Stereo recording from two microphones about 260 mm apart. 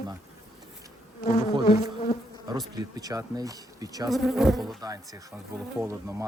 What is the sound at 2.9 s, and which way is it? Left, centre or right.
Speech, centre.